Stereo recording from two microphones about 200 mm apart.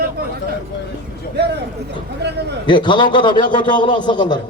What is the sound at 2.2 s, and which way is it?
Speech, 55° right (ahead or behind).